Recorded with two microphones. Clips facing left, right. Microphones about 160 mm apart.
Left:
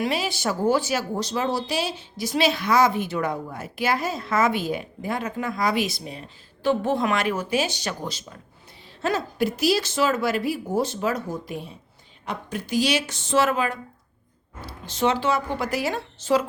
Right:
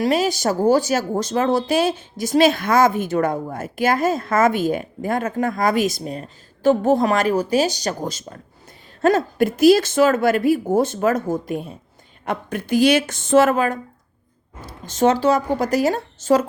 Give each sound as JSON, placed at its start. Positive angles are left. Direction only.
{"t": 0.0, "sound": "speech", "side_deg": -45}